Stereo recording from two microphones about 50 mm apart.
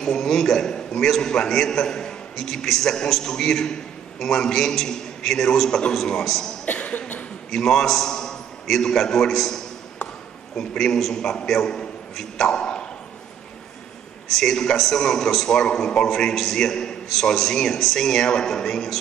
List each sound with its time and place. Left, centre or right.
0.0 s a man's voice: centre
6.6 s chuckle: left
7.5 s a man's voice: centre
14.2 s a man's voice: centre